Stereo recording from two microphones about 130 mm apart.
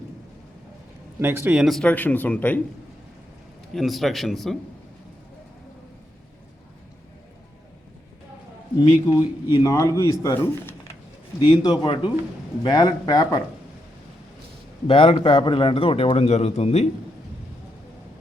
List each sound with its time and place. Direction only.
1.2 s speech: 15° right (ahead or behind)
1.8 s speech: 10° left (ahead or behind)
3.8 s speech: centre (ahead or behind)
8.8 s a man's voice: 30° left (ahead or behind)
11.3 s a man's voice: 40° left (ahead or behind)
14.8 s a man's voice: 40° left (ahead or behind)